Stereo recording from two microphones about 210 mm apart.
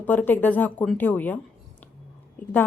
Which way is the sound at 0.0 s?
10° left (ahead or behind).